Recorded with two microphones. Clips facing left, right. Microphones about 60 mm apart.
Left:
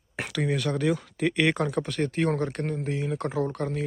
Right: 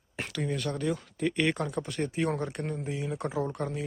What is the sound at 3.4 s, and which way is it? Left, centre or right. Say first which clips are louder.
Speech: left 4 dB; centre.